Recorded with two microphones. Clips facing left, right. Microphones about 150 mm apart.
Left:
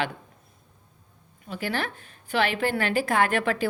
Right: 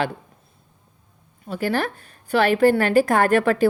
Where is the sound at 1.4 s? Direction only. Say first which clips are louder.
Right 6 dB; 40° right (ahead or behind).